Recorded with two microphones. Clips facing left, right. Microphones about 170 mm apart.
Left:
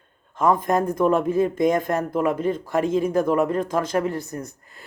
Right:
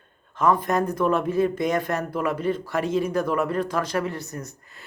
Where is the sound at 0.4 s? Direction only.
20° left (ahead or behind).